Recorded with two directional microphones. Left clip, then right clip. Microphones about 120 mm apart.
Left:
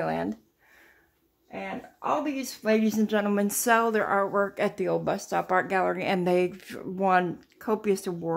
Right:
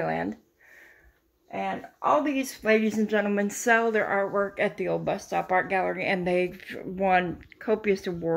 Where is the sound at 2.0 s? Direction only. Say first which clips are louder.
Right 4 dB; 10° left (ahead or behind); by 4.3 s 30° left (ahead or behind).